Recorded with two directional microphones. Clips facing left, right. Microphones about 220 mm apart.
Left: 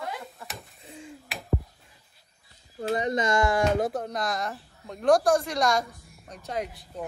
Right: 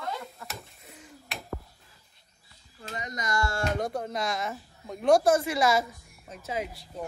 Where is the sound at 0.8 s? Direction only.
30° left (ahead or behind).